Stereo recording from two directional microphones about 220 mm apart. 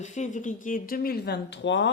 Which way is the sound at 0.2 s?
35° left (ahead or behind).